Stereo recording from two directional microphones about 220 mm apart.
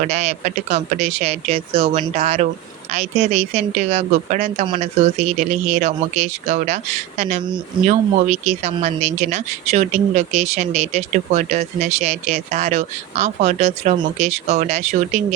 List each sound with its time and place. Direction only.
0.0 s speech: 30° right (ahead or behind)